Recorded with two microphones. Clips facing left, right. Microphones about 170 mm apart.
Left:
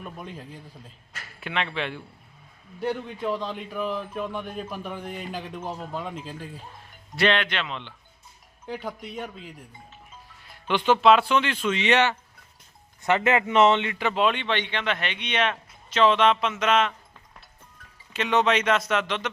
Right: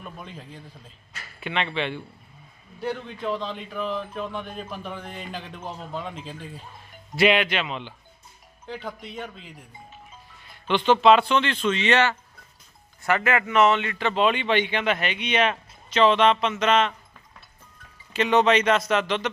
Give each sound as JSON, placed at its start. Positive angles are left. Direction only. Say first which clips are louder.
{"t": 0.0, "sound": "speech", "louder": "left 2 dB", "side_deg": 10}
{"t": 7.2, "sound": "a man's voice", "louder": "right 3 dB", "side_deg": -5}
{"t": 8.6, "sound": "speech", "louder": "left 1 dB", "side_deg": 15}
{"t": 14.1, "sound": "speech", "louder": "right 3 dB", "side_deg": 0}
{"t": 18.1, "sound": "speech", "louder": "right 3 dB", "side_deg": 0}